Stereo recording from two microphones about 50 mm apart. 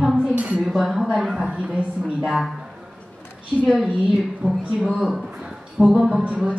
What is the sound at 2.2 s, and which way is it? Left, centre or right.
Speech, centre.